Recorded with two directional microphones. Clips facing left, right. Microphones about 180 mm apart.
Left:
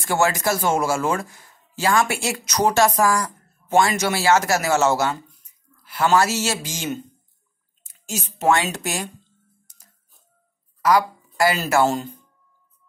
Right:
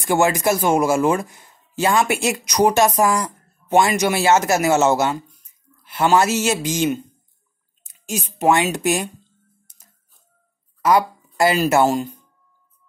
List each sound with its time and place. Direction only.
0.0 s speech: 15° right (ahead or behind)
10.8 s a sound: 25° right (ahead or behind)
11.6 s speech: 15° right (ahead or behind)